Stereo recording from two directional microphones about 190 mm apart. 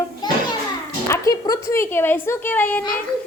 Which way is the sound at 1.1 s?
20° left (ahead or behind).